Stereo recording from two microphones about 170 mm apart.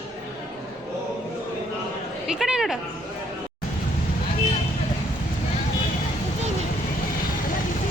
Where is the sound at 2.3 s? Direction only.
5° right (ahead or behind).